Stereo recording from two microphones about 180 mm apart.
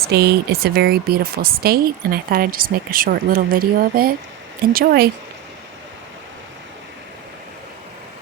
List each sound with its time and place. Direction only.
0.0 s speech: 65° right (ahead or behind)